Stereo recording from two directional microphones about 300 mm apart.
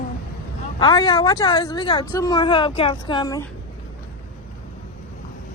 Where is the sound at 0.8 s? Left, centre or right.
Centre.